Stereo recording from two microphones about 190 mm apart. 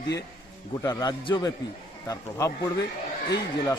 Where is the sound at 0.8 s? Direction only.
20° left (ahead or behind).